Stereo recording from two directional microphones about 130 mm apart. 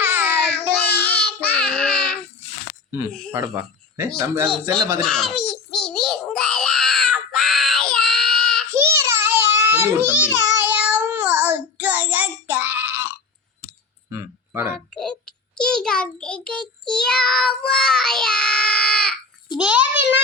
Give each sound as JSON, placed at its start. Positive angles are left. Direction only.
{"t": 0.0, "sound": "babbling", "side_deg": -15}
{"t": 0.8, "sound": "babbling", "side_deg": 10}
{"t": 3.1, "sound": "speech", "side_deg": 5}
{"t": 3.3, "sound": "speech", "side_deg": -15}
{"t": 5.0, "sound": "a sound", "side_deg": 5}
{"t": 8.7, "sound": "baby cry", "side_deg": -20}
{"t": 10.3, "sound": "child singing", "side_deg": -15}
{"t": 14.1, "sound": "a sound", "side_deg": -20}
{"t": 14.9, "sound": "child singing", "side_deg": 5}
{"t": 19.5, "sound": "a sound", "side_deg": -10}